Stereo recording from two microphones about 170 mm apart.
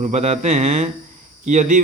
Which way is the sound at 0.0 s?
40° right (ahead or behind).